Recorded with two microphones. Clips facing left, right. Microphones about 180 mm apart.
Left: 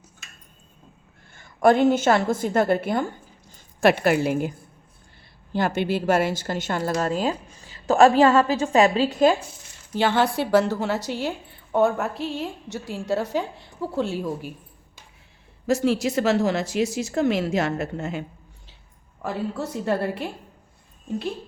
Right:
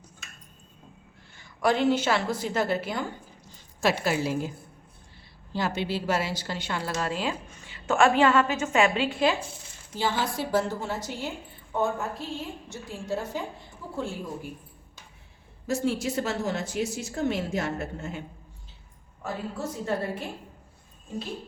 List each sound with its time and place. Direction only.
1.4 s a woman's voice: 50° left (ahead or behind)
5.5 s a woman's voice: 50° left (ahead or behind)
9.9 s a woman's voice: 70° left (ahead or behind)
15.6 s a woman's voice: 85° left; by 20.2 s 70° left (ahead or behind)